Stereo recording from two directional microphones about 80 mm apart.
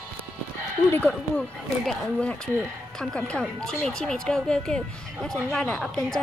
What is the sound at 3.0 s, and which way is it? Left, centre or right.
Speech, centre.